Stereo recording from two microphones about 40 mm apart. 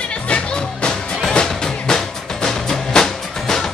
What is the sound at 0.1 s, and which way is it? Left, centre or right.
Music, left.